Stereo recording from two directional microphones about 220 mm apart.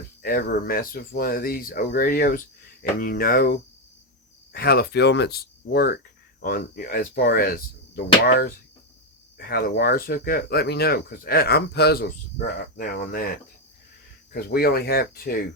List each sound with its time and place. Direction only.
0.2 s speech: 40° left (ahead or behind)
14.3 s speech: 45° left (ahead or behind)